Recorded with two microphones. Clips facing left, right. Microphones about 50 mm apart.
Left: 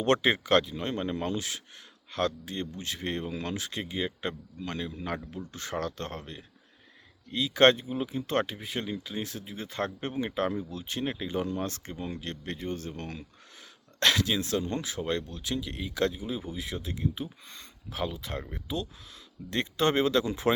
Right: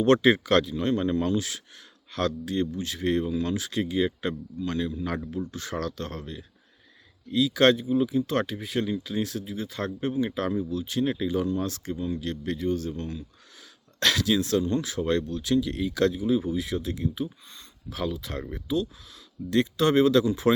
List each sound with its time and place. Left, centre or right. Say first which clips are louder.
0.0 s speech: right 5 dB; left
3.2 s speech: right 6 dB; left
9.6 s speech: even; left
13.6 s a sound: even; centre
14.6 s speech: right 6 dB; left
14.8 s speech: right 5 dB; centre
17.4 s speech: left 1 dB; left
17.8 s speech: right 3 dB; left